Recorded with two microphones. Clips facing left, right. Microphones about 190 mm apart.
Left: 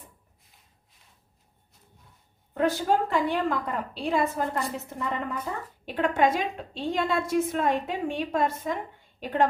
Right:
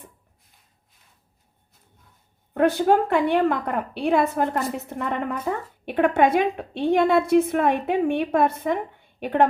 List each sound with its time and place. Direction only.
2.5 s a woman's voice: 60° right (ahead or behind)